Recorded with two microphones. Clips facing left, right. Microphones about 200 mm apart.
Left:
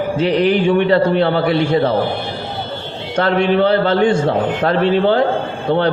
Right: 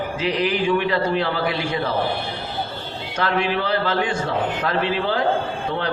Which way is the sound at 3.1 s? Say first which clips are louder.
Left 8 dB; 35° left (ahead or behind).